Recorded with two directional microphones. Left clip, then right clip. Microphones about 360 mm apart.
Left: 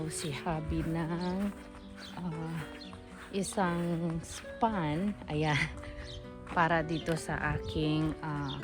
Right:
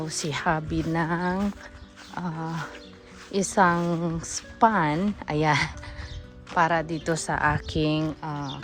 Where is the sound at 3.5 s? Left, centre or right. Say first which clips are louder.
Right 12 dB; centre.